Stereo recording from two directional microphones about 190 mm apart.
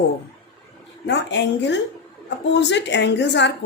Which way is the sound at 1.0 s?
70° left (ahead or behind).